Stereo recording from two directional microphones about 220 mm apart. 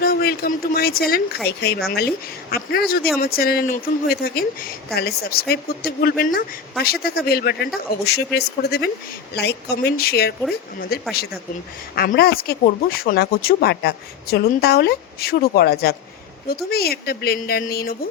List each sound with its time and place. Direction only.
0.0 s speech: 45° left (ahead or behind)